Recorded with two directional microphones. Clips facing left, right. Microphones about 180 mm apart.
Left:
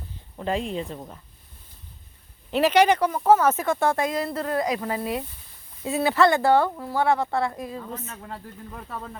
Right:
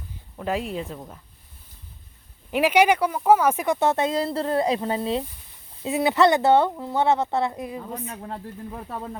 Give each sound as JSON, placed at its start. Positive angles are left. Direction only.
{"t": 0.4, "sound": "speech", "side_deg": -5}
{"t": 2.5, "sound": "speech", "side_deg": -10}
{"t": 8.2, "sound": "speech", "side_deg": -25}